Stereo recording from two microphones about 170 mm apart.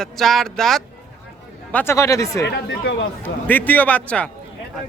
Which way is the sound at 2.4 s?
85° left.